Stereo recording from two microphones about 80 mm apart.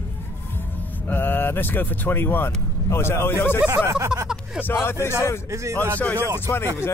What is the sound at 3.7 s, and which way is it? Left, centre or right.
Speech, right.